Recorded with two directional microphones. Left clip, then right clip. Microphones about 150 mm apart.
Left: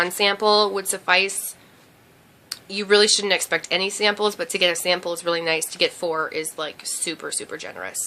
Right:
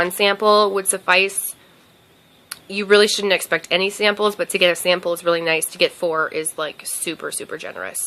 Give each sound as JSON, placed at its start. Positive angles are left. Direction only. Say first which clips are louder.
{"t": 0.0, "sound": "speech", "louder": "right 3 dB", "side_deg": -35}
{"t": 2.5, "sound": "speech", "louder": "right 3 dB", "side_deg": -40}